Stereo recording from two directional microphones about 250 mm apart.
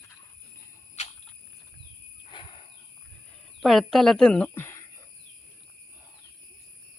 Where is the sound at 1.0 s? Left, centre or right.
Left.